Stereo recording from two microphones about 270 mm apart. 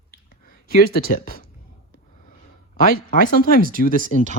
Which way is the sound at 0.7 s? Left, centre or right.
Left.